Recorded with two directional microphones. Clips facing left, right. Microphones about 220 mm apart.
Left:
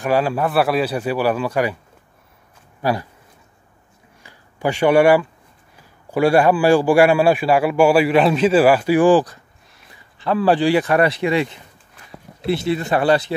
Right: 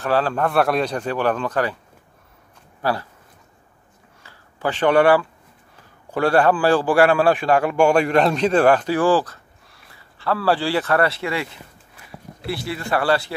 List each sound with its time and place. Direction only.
0.0 s a man's voice: 10° left (ahead or behind)
2.8 s a man's voice: 15° left (ahead or behind)
4.2 s a sound: 15° left (ahead or behind)
6.1 s a man's voice: 10° left (ahead or behind)